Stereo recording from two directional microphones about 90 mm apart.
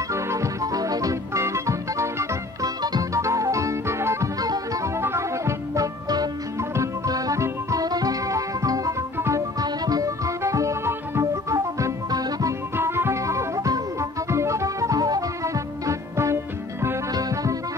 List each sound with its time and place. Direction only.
0.1 s music: 35° right (ahead or behind)
4.4 s music: 45° right (ahead or behind)
4.9 s music: 30° right (ahead or behind)
6.0 s music: 45° right (ahead or behind); by 11.5 s 30° right (ahead or behind)
11.5 s music: 45° right (ahead or behind)
12.7 s music: 25° right (ahead or behind)